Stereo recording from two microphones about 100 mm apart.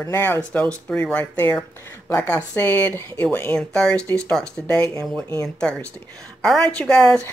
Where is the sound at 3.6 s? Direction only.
5° left (ahead or behind).